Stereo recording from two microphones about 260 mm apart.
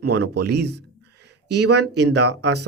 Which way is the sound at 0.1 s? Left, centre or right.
Right.